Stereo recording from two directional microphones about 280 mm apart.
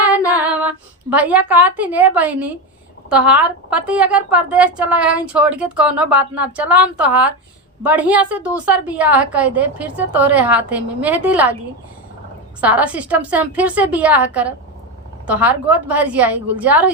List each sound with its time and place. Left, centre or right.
0.3 s female singing: centre
1.8 s a woman's voice: centre
12.5 s a woman's voice: centre